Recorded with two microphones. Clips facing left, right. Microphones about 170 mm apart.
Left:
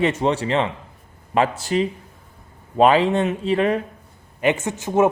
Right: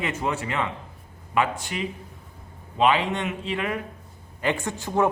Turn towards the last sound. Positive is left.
turn(degrees=20)  # may be behind; listen again after turning